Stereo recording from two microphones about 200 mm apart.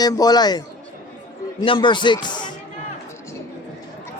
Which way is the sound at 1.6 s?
25° left (ahead or behind).